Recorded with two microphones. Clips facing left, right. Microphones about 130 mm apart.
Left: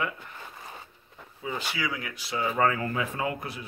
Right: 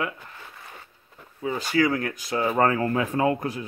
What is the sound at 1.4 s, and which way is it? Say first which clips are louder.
Speech: right 9 dB; 45° right (ahead or behind).